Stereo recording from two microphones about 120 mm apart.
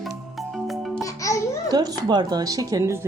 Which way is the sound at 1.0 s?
25° left (ahead or behind).